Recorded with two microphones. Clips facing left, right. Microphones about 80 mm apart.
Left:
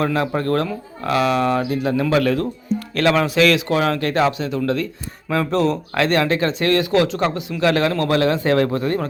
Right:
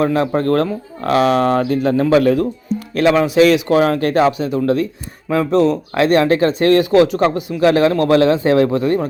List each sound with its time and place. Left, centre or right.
0.0 s a man's voice: right
0.3 s speech: right
2.0 s a man's voice: right
2.9 s speech: centre
3.3 s a man's voice: right
5.5 s speech: centre
5.9 s a man's voice: right